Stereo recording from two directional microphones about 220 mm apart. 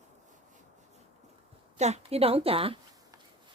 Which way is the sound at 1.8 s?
30° right (ahead or behind).